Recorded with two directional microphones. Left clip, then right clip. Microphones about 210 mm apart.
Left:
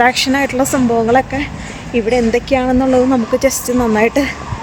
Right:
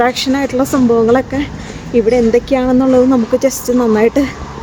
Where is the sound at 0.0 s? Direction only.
Centre (ahead or behind).